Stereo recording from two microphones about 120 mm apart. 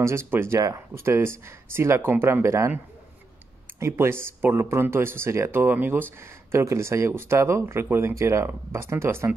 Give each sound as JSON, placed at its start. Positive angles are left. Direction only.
{"t": 0.0, "sound": "speech", "side_deg": -20}
{"t": 3.8, "sound": "speech", "side_deg": -20}